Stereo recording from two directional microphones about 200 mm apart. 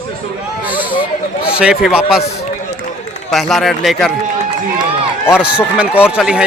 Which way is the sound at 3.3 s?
Centre (ahead or behind).